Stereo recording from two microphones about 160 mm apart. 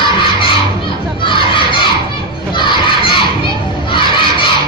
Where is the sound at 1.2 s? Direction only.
30° left (ahead or behind).